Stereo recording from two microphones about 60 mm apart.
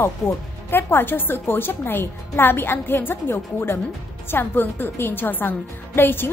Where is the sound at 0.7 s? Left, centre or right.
Left.